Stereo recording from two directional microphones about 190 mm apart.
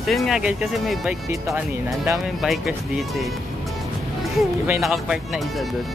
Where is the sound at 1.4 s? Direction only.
15° right (ahead or behind).